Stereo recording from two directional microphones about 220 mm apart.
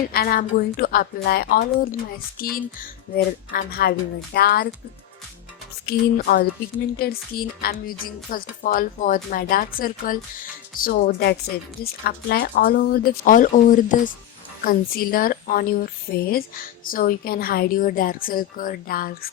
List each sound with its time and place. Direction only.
0.1 s speech: 40° left (ahead or behind)
5.8 s a woman's voice: 45° left (ahead or behind)